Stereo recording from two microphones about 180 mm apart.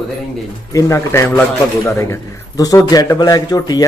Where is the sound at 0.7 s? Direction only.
15° left (ahead or behind).